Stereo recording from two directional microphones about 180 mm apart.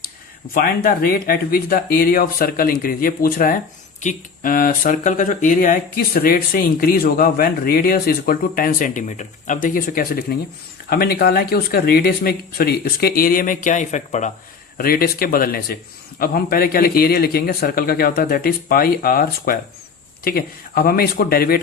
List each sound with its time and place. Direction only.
0.5 s a man's voice: 55° left (ahead or behind)
14.8 s a man's voice: 55° left (ahead or behind)